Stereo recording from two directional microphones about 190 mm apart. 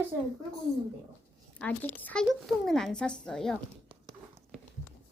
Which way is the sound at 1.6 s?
10° left (ahead or behind).